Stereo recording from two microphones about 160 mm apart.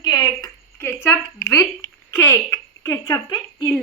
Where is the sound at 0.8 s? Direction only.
15° left (ahead or behind).